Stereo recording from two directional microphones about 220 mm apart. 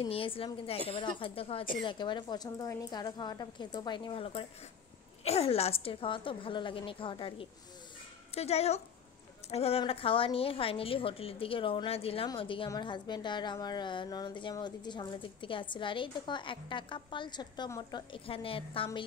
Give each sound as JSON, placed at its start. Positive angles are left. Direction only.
{"t": 0.0, "sound": "a woman's voice", "side_deg": 25}